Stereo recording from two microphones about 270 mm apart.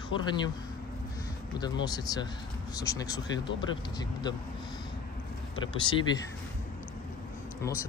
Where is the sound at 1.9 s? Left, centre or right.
Centre.